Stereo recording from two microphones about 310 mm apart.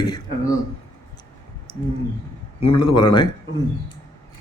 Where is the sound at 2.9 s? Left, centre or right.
Centre.